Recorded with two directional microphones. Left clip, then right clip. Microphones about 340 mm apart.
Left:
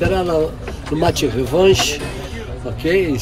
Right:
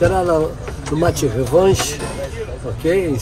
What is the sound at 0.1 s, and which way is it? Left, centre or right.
Speech, centre.